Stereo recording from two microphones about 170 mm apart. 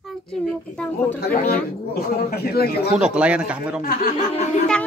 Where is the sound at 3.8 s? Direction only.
60° left (ahead or behind).